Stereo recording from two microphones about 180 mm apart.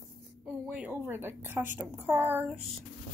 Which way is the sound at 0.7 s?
10° right (ahead or behind).